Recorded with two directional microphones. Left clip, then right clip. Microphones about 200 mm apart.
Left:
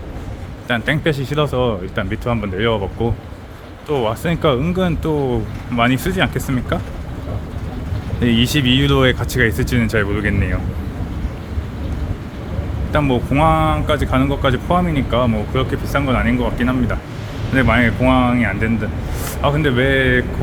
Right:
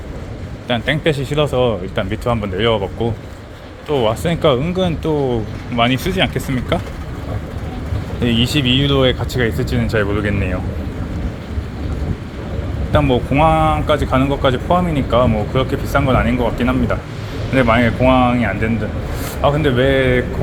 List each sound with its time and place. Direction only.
0.7 s speech: 15° left (ahead or behind)
8.2 s speech: 20° left (ahead or behind)
12.9 s speech: 15° left (ahead or behind)